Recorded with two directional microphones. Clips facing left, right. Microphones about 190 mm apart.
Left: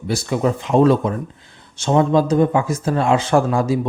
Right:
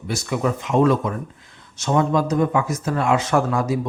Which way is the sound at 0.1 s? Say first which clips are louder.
Left 3 dB; 30° left (ahead or behind).